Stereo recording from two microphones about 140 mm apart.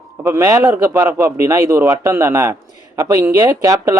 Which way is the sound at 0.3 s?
20° right (ahead or behind).